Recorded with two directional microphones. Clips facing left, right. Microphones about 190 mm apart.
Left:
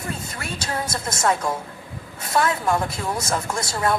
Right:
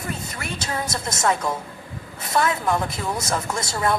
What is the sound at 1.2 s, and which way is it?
Speech, centre (ahead or behind).